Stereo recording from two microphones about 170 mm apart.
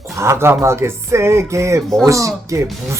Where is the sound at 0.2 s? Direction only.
15° right (ahead or behind).